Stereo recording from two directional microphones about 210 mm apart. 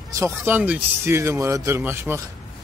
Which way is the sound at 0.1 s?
10° right (ahead or behind).